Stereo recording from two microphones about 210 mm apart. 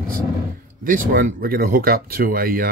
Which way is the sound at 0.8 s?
40° right (ahead or behind).